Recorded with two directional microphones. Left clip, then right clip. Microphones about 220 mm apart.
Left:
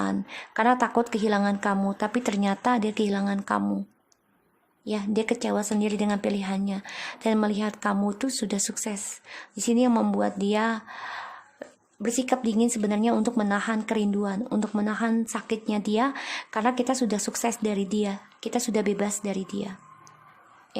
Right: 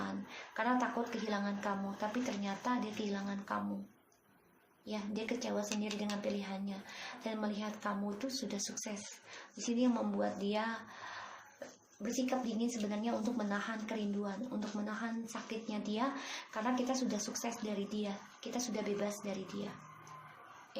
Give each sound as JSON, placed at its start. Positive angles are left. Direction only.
{"t": 0.0, "sound": "speech", "side_deg": 45}
{"t": 4.9, "sound": "speech", "side_deg": 45}